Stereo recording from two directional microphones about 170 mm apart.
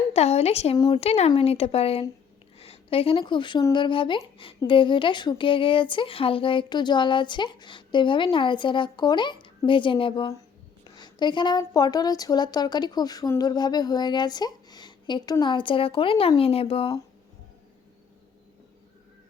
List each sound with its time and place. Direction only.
0.1 s speech: 35° left (ahead or behind)